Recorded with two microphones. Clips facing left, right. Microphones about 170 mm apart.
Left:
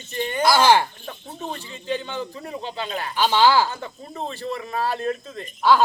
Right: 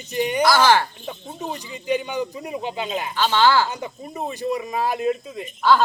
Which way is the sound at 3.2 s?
15° left (ahead or behind).